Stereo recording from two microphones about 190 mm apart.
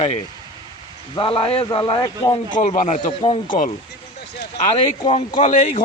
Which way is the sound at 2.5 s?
40° left (ahead or behind).